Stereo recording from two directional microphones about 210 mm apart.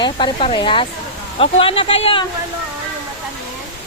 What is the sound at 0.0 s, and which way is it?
Speech, 20° left (ahead or behind).